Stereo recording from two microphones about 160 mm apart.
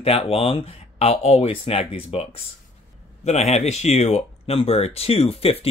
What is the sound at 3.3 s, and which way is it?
Speech, 45° left (ahead or behind).